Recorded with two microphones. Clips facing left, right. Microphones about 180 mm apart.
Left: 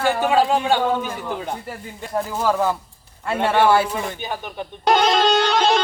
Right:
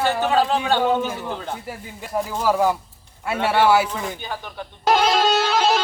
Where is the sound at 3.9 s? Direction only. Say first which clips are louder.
Left 2 dB; 15° left (ahead or behind).